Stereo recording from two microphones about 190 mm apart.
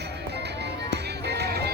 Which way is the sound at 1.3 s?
60° right (ahead or behind).